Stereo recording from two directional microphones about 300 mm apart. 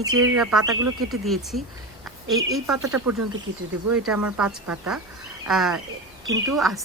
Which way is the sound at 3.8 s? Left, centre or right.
Right.